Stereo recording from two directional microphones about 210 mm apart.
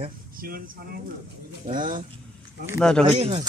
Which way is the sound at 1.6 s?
40° right (ahead or behind).